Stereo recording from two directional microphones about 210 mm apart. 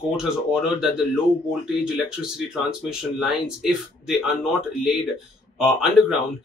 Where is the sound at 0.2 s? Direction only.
5° right (ahead or behind).